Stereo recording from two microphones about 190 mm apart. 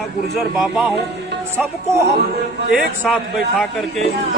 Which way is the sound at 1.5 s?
15° right (ahead or behind).